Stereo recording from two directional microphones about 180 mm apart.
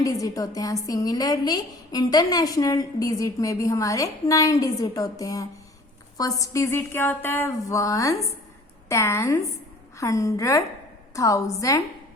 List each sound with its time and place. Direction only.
0.0 s speech: 20° left (ahead or behind)